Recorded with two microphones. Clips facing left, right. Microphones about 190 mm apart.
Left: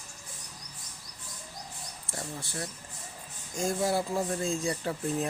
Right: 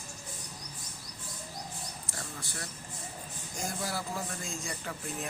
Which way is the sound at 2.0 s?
25° left (ahead or behind).